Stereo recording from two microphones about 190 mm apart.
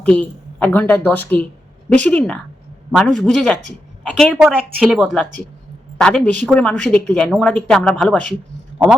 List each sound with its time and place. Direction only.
0.0 s a woman's voice: 5° left (ahead or behind)